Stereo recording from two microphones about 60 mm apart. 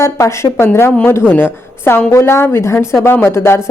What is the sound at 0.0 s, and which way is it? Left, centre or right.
A woman's voice, left.